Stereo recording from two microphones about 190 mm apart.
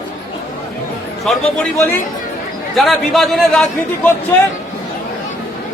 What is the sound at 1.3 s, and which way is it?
Speech, 5° left (ahead or behind).